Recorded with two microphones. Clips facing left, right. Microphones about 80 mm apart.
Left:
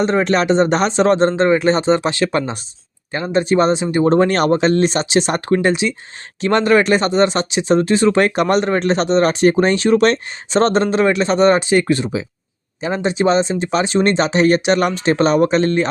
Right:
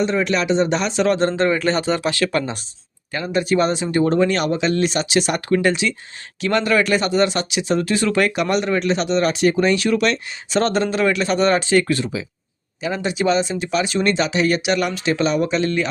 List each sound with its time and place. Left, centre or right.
0.0 s speech: left
6.4 s speech: left